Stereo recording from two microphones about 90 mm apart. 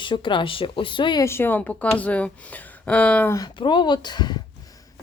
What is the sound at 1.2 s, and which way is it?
A woman's voice, 25° left (ahead or behind).